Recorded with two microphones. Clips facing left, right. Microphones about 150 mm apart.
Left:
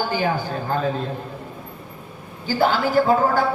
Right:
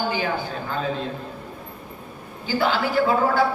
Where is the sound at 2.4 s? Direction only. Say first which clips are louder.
Left 3 dB; 45° left (ahead or behind).